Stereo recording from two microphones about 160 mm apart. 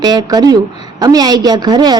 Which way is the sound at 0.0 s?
25° right (ahead or behind).